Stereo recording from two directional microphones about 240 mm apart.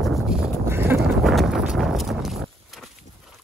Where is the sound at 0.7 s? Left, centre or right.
Centre.